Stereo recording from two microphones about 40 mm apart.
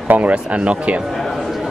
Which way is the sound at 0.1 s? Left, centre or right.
Right.